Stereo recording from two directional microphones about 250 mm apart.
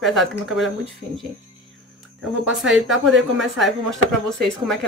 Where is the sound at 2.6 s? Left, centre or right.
Centre.